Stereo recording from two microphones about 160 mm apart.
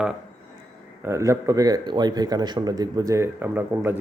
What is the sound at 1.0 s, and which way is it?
A man's voice, 20° right (ahead or behind).